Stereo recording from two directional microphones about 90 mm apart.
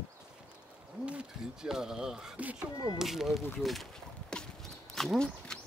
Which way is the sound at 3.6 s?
Centre (ahead or behind).